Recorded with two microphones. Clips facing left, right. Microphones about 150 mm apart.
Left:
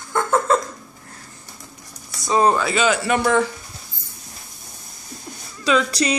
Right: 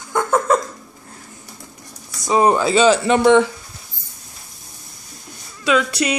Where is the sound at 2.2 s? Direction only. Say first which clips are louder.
Right 2 dB; 15° right (ahead or behind).